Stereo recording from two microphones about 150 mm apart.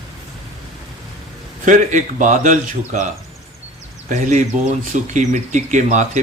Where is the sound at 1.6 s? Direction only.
60° right (ahead or behind).